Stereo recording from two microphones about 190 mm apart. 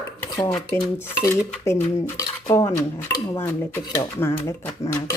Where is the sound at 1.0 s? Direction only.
10° left (ahead or behind).